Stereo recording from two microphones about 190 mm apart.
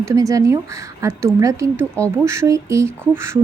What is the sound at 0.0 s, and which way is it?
Speech, 15° right (ahead or behind).